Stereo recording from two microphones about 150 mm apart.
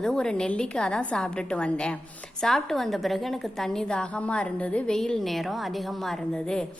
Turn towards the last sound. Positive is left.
turn(degrees=5)  # may be behind; listen again after turning